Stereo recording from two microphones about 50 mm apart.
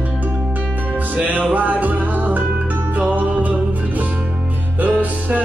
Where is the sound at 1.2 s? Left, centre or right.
Right.